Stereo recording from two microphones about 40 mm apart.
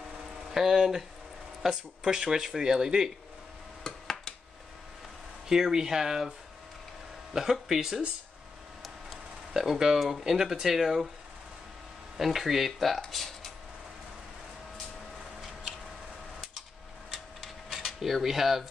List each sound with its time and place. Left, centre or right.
0.5 s speech: centre
3.8 s a sound: centre
5.5 s speech: centre
7.6 s speech: centre
9.5 s speech: centre
12.2 s speech: centre
17.6 s a sound: centre